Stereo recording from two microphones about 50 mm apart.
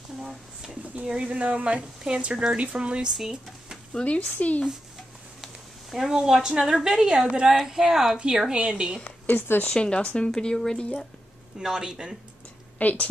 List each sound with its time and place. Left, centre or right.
0.3 s speech: centre
1.0 s a woman's voice: centre
3.1 s speech: centre
4.0 s speech: centre
4.4 s speech: left
5.4 s a sound: centre
6.7 s a woman's voice: centre
8.5 s speech: centre
9.0 s a woman's voice: left
9.7 s speech: centre
11.6 s a woman's voice: centre
12.7 s a woman's voice: left